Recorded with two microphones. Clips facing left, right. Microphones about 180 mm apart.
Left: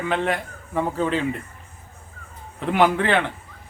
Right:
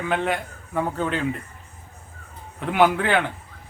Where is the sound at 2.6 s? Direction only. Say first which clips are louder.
Even; centre (ahead or behind).